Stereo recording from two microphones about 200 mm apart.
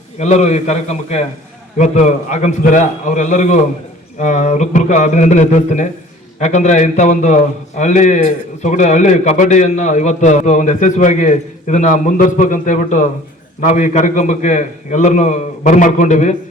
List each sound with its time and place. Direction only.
0.2 s a man's voice: 35° left (ahead or behind)